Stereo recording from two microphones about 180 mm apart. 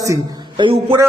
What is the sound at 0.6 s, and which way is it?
Speech, 30° right (ahead or behind).